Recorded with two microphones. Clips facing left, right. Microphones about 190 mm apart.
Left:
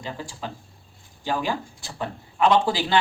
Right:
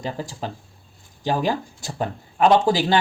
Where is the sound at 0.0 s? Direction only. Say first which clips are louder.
Right 4 dB; 40° right (ahead or behind).